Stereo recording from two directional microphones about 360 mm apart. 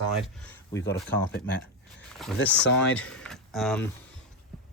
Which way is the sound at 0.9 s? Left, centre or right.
Centre.